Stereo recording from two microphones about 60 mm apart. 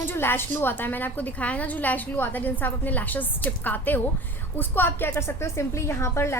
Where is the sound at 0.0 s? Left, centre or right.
Left.